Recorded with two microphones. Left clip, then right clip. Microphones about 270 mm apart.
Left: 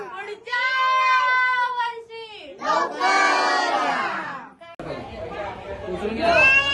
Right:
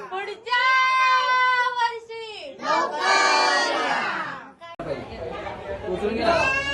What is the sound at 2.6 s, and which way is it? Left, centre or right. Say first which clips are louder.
Battle cry: left 1 dB; centre.